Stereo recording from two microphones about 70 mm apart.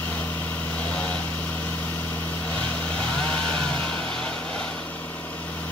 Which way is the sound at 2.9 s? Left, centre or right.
Centre.